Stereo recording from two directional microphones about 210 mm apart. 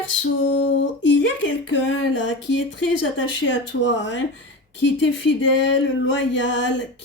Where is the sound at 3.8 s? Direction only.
60° left (ahead or behind).